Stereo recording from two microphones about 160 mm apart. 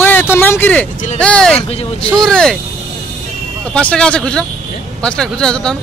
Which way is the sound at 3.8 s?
5° left (ahead or behind).